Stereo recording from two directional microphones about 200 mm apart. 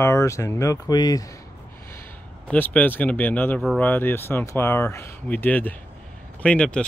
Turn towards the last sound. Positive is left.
turn(degrees=5)  # may be behind; listen again after turning